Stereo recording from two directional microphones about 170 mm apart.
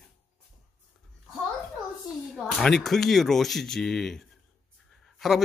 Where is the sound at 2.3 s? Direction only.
Centre (ahead or behind).